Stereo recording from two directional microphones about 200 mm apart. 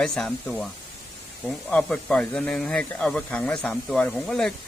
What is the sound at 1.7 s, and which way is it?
Speech, 5° left (ahead or behind).